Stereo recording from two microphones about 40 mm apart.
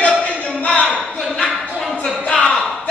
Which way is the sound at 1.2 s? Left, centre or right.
Centre.